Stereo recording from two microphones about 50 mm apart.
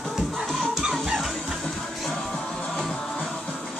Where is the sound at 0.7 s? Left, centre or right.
Centre.